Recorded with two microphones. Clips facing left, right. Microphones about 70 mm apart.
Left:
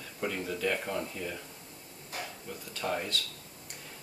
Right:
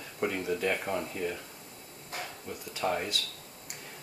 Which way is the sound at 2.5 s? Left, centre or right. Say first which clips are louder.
Right 3 dB; centre.